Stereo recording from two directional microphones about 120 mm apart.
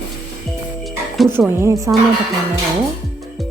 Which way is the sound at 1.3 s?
20° right (ahead or behind).